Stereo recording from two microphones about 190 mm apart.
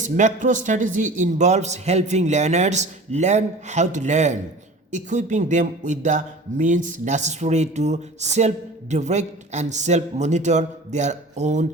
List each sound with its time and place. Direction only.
0.0 s speech: 40° right (ahead or behind)